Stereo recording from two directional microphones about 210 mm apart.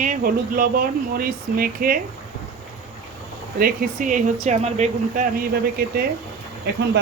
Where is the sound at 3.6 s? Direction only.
40° right (ahead or behind).